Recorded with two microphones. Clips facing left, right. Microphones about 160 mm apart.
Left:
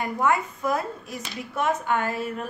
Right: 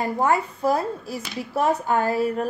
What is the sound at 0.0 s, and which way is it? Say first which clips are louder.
A woman's voice: right 2 dB; 35° right (ahead or behind).